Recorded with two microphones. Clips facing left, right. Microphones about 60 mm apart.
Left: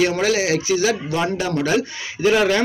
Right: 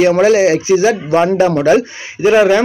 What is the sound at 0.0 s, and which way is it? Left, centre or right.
A man's voice, right.